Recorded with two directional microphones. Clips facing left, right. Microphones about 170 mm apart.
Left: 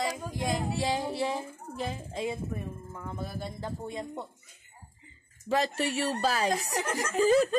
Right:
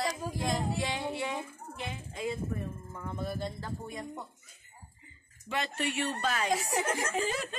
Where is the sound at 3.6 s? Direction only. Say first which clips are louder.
Left 4 dB; 25° left (ahead or behind).